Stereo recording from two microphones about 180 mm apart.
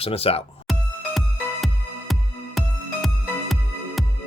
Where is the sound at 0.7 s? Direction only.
Centre (ahead or behind).